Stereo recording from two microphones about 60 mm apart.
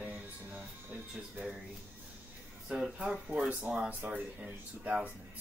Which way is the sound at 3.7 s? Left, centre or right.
Right.